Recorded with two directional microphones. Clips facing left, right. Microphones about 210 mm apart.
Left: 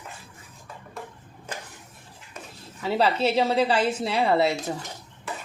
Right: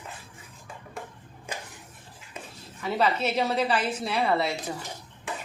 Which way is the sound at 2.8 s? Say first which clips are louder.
Left 3 dB; 30° left (ahead or behind).